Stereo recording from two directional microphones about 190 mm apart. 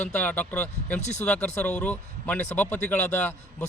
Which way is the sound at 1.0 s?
35° left (ahead or behind).